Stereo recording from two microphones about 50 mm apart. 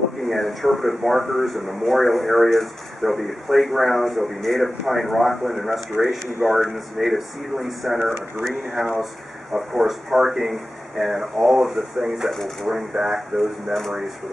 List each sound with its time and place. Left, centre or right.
0.3 s speech: centre
5.6 s speech: centre
6.4 s speech: centre